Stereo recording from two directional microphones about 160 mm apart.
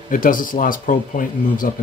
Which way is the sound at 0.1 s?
60° left (ahead or behind).